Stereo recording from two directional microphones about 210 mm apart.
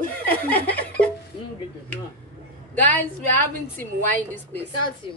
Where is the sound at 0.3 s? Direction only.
10° left (ahead or behind).